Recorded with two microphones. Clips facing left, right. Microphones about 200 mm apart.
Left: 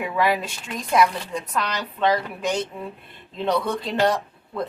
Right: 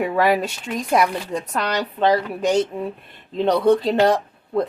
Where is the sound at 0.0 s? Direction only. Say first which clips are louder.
Right 4 dB; 40° right (ahead or behind).